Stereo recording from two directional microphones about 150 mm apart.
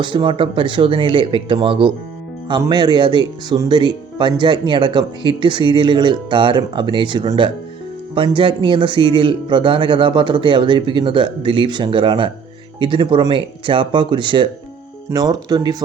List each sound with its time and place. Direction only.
0.0 s speech: 30° right (ahead or behind)